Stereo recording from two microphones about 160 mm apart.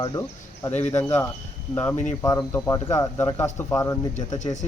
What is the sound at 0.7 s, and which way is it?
Speech, 45° left (ahead or behind).